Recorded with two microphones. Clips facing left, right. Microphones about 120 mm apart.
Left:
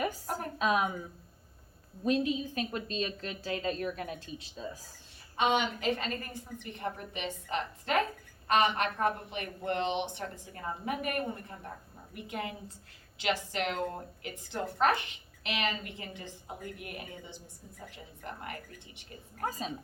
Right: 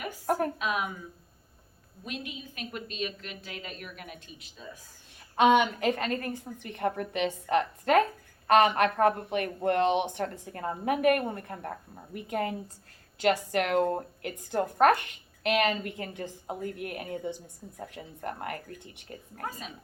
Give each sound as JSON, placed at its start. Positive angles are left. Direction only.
{"t": 0.3, "sound": "a woman's voice", "side_deg": -50}
{"t": 0.6, "sound": "a woman's voice", "side_deg": 35}
{"t": 2.0, "sound": "a woman's voice", "side_deg": 35}
{"t": 5.4, "sound": "a woman's voice", "side_deg": -55}
{"t": 19.4, "sound": "a woman's voice", "side_deg": 30}